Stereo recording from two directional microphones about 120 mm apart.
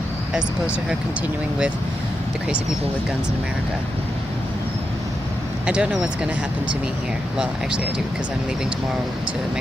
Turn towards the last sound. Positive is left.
turn(degrees=-5)  # may be behind; listen again after turning